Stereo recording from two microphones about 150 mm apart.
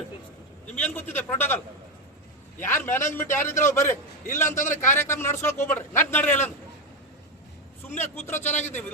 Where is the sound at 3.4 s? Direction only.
55° left (ahead or behind).